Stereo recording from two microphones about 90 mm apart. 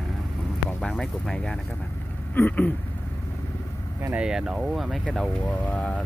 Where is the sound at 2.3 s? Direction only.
20° left (ahead or behind).